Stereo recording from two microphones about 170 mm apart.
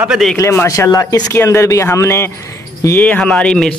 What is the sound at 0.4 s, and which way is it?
Speech, 15° left (ahead or behind).